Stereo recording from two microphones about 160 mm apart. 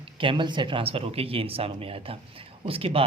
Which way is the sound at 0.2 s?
30° right (ahead or behind).